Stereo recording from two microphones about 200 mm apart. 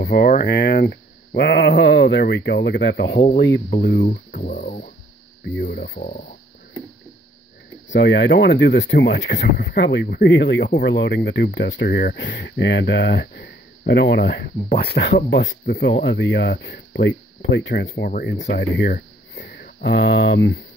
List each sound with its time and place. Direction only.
0.0 s speech: 50° left (ahead or behind)
3.1 s speech: 35° left (ahead or behind)
3.3 s speech: 55° left (ahead or behind)
5.4 s speech: 55° left (ahead or behind)
7.9 s speech: 60° left (ahead or behind)